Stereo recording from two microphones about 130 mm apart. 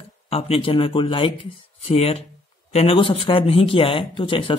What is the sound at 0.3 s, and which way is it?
Speech, 45° left (ahead or behind).